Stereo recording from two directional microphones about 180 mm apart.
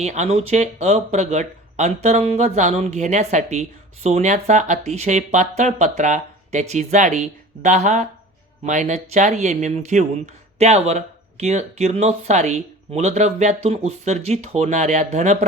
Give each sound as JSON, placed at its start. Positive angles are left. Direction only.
{"t": 0.0, "sound": "speech", "side_deg": -40}